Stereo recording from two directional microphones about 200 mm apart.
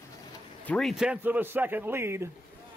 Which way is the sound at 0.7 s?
Centre (ahead or behind).